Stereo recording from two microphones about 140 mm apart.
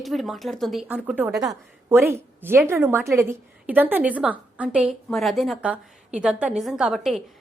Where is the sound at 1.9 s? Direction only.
15° right (ahead or behind).